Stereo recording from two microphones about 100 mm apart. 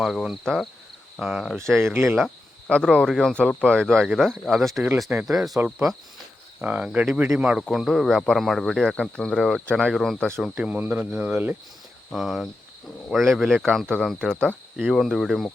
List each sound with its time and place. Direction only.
0.0 s speech: 5° right (ahead or behind)
1.8 s speech: 20° right (ahead or behind)
2.6 s speech: 10° left (ahead or behind)
10.4 s speech: 10° right (ahead or behind)
12.1 s speech: centre (ahead or behind)